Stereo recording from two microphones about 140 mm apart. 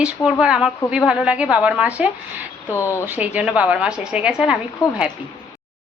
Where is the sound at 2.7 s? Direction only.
20° left (ahead or behind).